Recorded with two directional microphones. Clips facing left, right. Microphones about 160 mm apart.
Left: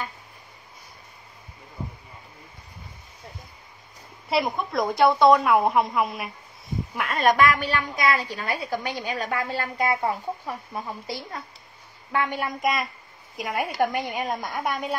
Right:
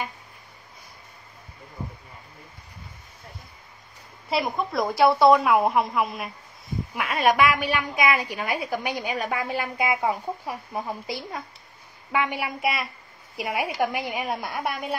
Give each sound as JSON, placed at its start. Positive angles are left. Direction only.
{"t": 4.3, "sound": "a woman's voice", "side_deg": 0}